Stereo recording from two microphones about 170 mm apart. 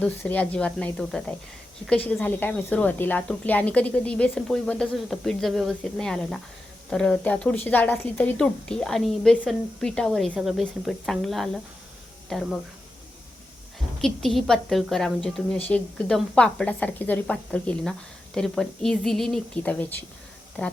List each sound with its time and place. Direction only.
0.0 s a woman's voice: 10° left (ahead or behind)
14.0 s a woman's voice: centre (ahead or behind)